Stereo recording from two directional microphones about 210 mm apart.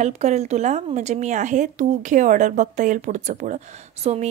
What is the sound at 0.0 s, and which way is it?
A woman's voice, 30° right (ahead or behind).